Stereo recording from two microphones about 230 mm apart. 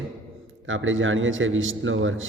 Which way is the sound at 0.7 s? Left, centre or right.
Right.